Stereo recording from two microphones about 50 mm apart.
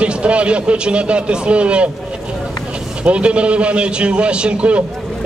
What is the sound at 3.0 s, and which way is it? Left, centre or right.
Speech, right.